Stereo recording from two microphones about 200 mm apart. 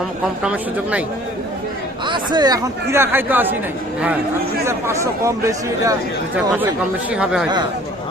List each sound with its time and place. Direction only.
0.4 s speech: 5° right (ahead or behind)
2.0 s speech: 20° right (ahead or behind)
4.6 s speech: 15° right (ahead or behind)
7.1 s speech: 5° right (ahead or behind)